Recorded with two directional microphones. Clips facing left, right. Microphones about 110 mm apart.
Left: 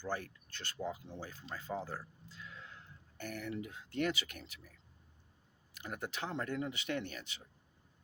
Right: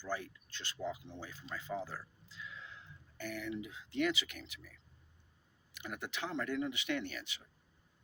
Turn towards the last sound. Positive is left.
turn(degrees=35)  # may be behind; listen again after turning